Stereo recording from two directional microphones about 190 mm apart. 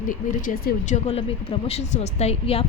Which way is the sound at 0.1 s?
45° left (ahead or behind).